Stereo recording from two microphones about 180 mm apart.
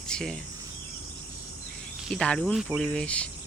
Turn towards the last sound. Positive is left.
turn(degrees=5)  # may be behind; listen again after turning